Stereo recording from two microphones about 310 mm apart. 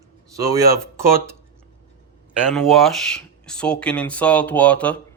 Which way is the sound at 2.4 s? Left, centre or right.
Centre.